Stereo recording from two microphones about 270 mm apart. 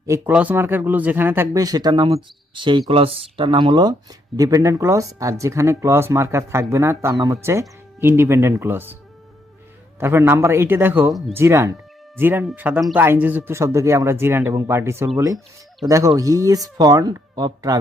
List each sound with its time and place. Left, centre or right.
0.1 s speech: centre
10.0 s speech: centre